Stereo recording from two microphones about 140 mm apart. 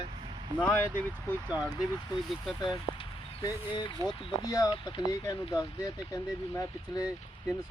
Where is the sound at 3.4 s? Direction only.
30° left (ahead or behind).